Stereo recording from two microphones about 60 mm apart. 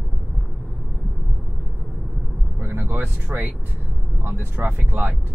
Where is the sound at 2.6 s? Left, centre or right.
Right.